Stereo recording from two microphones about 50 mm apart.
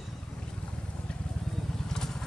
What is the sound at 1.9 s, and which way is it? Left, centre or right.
Vehicle, centre.